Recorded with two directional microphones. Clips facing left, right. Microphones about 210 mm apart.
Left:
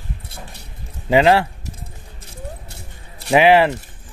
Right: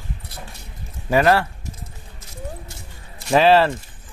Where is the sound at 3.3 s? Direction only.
15° left (ahead or behind).